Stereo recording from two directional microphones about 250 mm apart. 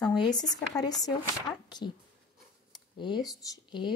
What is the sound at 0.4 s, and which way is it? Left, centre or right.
Speech, centre.